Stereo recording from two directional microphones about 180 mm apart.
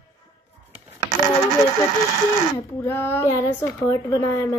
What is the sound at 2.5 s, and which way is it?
Speech, 10° left (ahead or behind).